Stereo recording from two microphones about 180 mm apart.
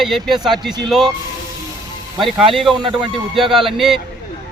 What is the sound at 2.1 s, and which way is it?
Speech, centre (ahead or behind).